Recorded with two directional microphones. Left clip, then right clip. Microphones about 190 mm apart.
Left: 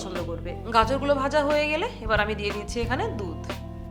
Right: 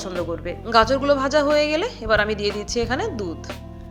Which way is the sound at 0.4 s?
15° right (ahead or behind).